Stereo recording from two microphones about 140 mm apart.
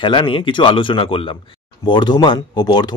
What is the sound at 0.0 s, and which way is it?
Speech, 35° left (ahead or behind).